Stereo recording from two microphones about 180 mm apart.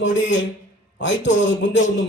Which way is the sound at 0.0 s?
90° left.